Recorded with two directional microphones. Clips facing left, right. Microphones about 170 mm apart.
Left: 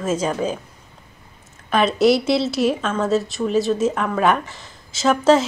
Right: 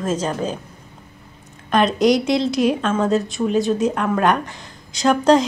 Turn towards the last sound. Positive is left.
turn(degrees=5)  # may be behind; listen again after turning